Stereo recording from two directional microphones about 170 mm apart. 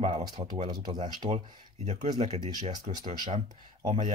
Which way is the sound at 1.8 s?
40° right (ahead or behind).